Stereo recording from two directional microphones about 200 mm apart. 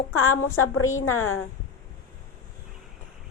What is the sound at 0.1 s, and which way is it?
Speech, 90° left.